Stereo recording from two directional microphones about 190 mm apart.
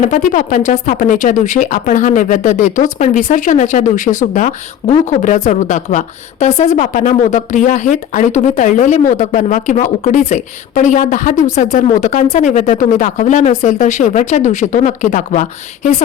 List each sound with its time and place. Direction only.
0.0 s speech: 40° left (ahead or behind)